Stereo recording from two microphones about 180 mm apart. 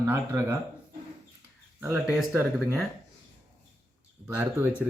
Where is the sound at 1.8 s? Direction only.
10° right (ahead or behind).